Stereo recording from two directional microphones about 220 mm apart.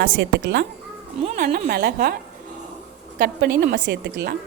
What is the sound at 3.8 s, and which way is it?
Speech, 50° right (ahead or behind).